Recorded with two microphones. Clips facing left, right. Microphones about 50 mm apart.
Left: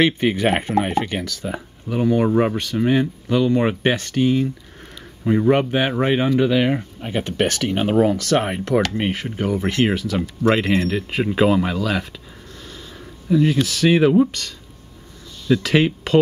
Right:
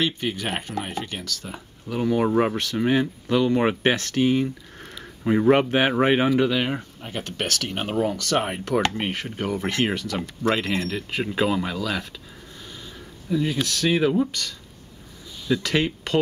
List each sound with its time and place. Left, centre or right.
0.0 s speech: left
1.9 s speech: centre
6.4 s speech: centre
7.0 s speech: left; by 10.5 s centre
10.5 s speech: left
13.5 s speech: centre
15.4 s speech: centre